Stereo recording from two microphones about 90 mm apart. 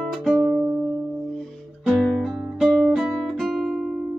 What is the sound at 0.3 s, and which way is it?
Music, 15° right (ahead or behind).